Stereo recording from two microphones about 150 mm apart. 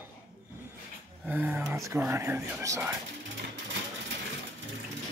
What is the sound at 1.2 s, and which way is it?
Speech, 10° right (ahead or behind).